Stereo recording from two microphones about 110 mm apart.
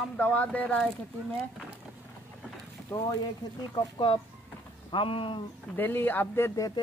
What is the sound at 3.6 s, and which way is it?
Speech, 50° left (ahead or behind).